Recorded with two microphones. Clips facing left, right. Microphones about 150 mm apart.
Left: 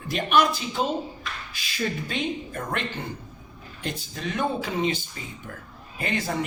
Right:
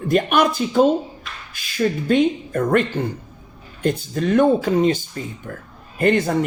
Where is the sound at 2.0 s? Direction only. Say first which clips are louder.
Right 12 dB; 55° right (ahead or behind).